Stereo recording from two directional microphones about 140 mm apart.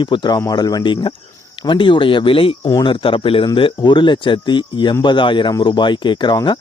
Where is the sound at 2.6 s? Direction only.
25° left (ahead or behind).